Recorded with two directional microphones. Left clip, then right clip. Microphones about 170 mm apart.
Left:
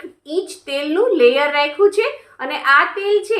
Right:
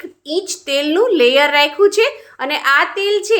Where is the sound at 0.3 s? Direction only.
45° right (ahead or behind).